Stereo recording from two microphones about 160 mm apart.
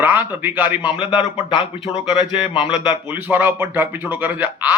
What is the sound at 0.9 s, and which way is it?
Speech, 30° left (ahead or behind).